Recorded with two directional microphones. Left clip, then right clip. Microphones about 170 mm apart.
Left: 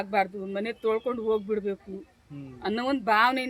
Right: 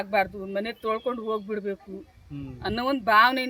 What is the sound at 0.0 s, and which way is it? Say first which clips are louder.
Speech: right 1 dB; 5° right (ahead or behind).